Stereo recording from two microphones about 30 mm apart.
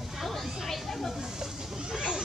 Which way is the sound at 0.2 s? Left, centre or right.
Centre.